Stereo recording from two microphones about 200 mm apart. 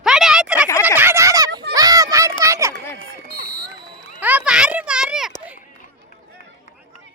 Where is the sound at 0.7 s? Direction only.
15° left (ahead or behind).